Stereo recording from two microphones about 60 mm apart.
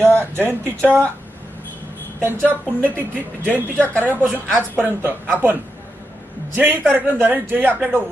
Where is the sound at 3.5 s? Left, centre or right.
Left.